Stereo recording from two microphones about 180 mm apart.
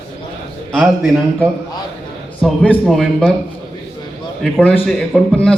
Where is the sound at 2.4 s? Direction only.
5° left (ahead or behind).